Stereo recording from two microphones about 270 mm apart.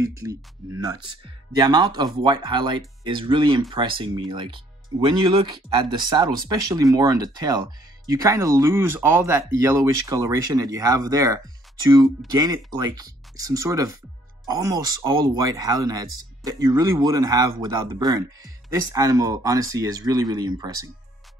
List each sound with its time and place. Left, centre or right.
0.2 s speech: centre